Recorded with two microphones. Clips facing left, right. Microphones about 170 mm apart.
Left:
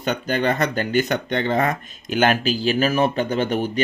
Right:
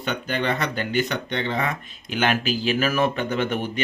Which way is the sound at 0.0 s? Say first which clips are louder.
Left 4 dB; 40° left (ahead or behind).